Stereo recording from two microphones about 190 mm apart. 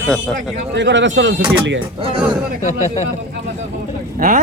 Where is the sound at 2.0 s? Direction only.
30° right (ahead or behind).